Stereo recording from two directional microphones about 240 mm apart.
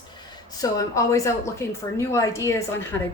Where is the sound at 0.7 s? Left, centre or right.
Centre.